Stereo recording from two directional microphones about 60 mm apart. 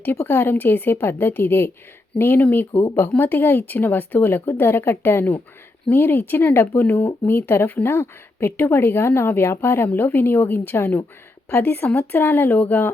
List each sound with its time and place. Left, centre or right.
0.3 s speech: left